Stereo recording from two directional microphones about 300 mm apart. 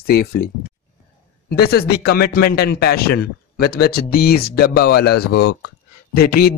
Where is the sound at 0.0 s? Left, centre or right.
Left.